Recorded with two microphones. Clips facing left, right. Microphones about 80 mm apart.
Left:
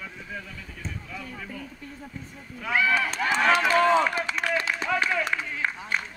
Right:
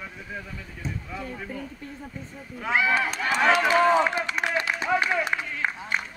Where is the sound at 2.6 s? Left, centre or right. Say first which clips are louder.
Right 1 dB; right.